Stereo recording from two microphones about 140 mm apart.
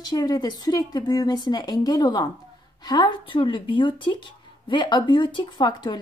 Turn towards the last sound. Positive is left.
turn(degrees=30)  # may be behind; listen again after turning